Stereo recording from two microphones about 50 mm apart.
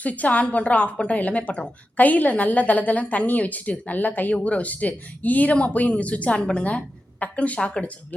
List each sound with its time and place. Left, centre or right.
0.0 s a woman's voice: left